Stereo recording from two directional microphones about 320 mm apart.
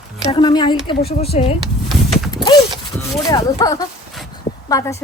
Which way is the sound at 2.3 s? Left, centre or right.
Centre.